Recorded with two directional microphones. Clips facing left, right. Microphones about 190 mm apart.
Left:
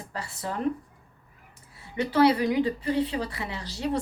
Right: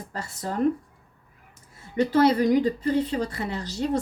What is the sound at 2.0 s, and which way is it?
Speech, 45° right (ahead or behind).